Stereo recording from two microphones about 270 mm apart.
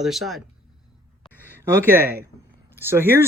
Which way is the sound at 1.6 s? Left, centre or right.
Centre.